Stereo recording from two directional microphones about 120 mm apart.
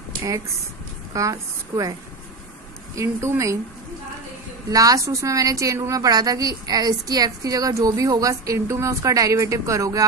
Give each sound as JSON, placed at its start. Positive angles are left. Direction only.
{"t": 1.1, "sound": "a woman's voice", "side_deg": -30}
{"t": 3.0, "sound": "a woman's voice", "side_deg": -25}
{"t": 4.6, "sound": "a woman's voice", "side_deg": -30}